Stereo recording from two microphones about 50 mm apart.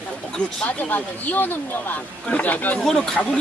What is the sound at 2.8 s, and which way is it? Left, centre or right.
Speech, centre.